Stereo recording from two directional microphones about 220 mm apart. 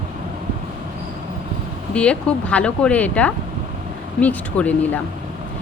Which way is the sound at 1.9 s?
5° left (ahead or behind).